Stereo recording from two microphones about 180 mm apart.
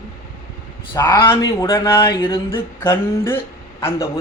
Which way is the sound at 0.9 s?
20° left (ahead or behind).